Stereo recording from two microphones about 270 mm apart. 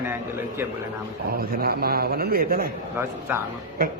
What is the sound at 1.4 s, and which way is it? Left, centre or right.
A man's voice, right.